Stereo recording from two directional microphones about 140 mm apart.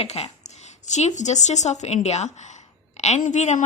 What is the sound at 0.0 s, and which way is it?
A woman's voice, 50° left (ahead or behind).